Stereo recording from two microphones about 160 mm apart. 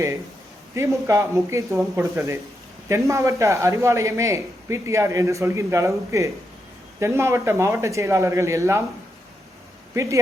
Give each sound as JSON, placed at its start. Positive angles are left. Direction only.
{"t": 0.7, "sound": "a man's voice", "side_deg": -15}
{"t": 9.9, "sound": "speech", "side_deg": -20}